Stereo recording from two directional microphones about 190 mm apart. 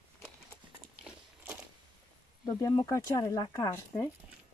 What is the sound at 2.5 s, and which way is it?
Speech, 20° left (ahead or behind).